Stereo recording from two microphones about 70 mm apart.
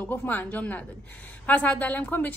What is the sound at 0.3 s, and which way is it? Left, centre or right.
A woman's voice, left.